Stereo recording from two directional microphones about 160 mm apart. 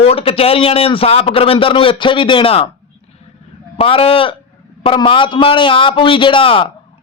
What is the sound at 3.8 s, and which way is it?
A man's voice, 35° left (ahead or behind).